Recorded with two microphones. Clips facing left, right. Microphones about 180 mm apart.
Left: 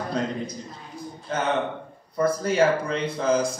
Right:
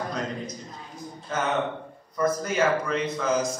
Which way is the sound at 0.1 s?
30° left (ahead or behind).